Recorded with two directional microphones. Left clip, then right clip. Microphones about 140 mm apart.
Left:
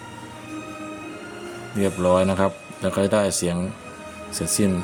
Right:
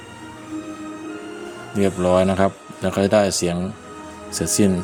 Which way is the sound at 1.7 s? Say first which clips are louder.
Right 2 dB; 15° right (ahead or behind).